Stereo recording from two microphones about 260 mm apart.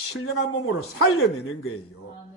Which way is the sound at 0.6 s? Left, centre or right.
Left.